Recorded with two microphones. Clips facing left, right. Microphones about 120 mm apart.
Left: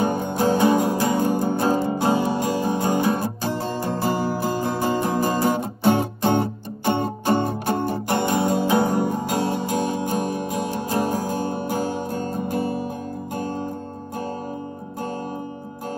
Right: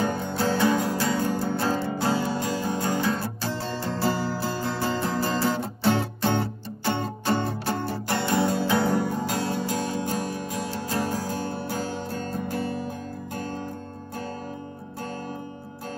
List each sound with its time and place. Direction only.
0.0 s music: 15° left (ahead or behind)